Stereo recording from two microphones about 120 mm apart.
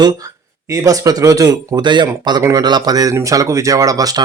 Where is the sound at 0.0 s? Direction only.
35° right (ahead or behind).